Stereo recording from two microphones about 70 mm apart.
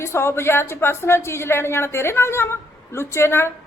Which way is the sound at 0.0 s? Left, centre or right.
Left.